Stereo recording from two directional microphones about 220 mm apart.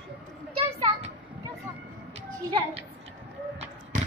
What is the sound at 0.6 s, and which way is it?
Children playing, 25° right (ahead or behind).